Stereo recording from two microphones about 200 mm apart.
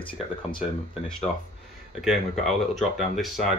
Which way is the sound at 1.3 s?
20° left (ahead or behind).